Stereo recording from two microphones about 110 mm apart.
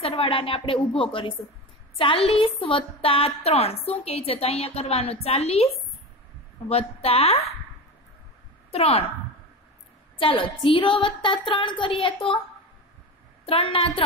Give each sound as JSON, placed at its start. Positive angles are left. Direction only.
{"t": 0.0, "sound": "a woman's voice", "side_deg": 55}
{"t": 6.7, "sound": "a woman's voice", "side_deg": 65}
{"t": 8.7, "sound": "a woman's voice", "side_deg": 70}
{"t": 10.1, "sound": "a woman's voice", "side_deg": 50}
{"t": 13.5, "sound": "a woman's voice", "side_deg": 55}